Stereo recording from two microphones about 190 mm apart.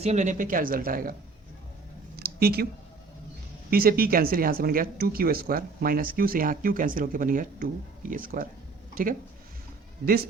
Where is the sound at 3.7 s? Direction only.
50° right (ahead or behind).